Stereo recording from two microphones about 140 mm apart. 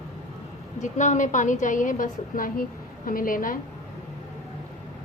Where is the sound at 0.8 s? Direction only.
60° left (ahead or behind); by 3.6 s 75° left (ahead or behind).